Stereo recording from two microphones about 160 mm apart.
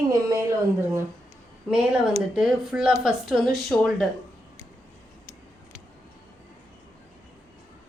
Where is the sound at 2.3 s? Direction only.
5° right (ahead or behind).